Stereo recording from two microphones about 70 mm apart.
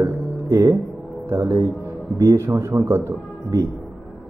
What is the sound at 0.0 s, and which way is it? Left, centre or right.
Music, right.